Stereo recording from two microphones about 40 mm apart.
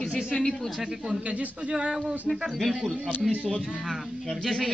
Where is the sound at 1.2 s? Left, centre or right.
Right.